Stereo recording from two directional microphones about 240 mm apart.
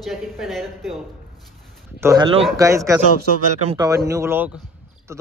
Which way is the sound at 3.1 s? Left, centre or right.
Right.